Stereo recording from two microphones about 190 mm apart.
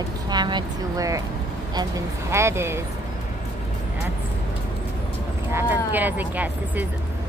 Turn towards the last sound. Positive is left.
turn(degrees=-10)  # may be behind; listen again after turning